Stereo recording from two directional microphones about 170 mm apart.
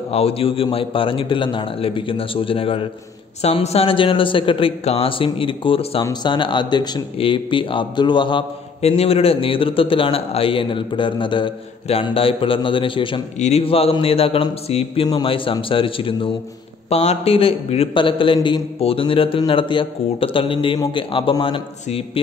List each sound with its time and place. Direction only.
0.1 s a man's voice: 35° left (ahead or behind)